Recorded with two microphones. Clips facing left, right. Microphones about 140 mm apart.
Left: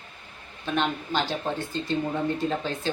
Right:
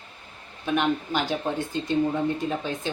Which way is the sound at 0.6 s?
10° right (ahead or behind).